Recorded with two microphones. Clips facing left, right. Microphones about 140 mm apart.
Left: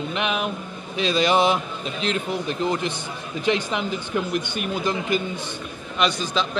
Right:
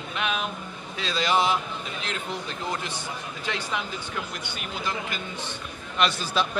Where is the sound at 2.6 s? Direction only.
20° left (ahead or behind).